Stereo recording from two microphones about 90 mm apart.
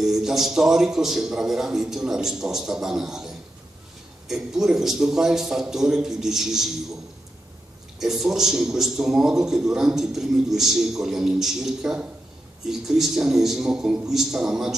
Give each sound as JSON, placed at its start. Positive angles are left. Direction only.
{"t": 0.0, "sound": "a man's voice", "side_deg": -5}
{"t": 8.0, "sound": "a man's voice", "side_deg": -5}